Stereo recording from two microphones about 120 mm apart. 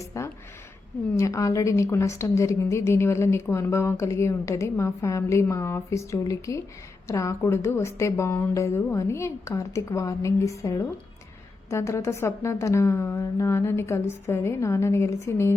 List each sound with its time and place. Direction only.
0.0 s a woman's voice: 25° left (ahead or behind)